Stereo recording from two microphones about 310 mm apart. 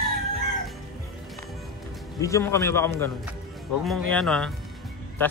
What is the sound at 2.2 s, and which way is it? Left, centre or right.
Speech, centre.